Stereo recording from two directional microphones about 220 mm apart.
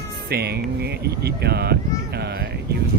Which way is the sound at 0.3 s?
45° right (ahead or behind).